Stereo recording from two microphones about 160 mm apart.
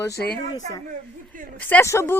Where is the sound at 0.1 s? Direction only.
80° left.